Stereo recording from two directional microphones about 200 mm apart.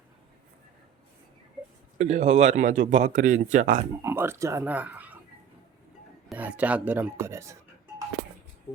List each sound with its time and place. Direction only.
2.0 s speech: 35° right (ahead or behind)
4.0 s speech: 10° right (ahead or behind)
6.2 s speech: 5° right (ahead or behind)